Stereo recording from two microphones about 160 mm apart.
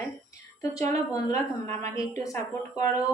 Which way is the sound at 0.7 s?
20° left (ahead or behind).